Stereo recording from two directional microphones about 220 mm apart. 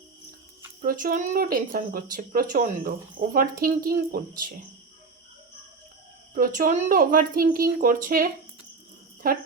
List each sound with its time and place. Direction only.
0.8 s speech: 40° right (ahead or behind)
6.3 s speech: 40° right (ahead or behind)